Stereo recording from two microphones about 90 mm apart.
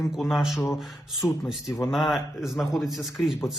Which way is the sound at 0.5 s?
30° left (ahead or behind).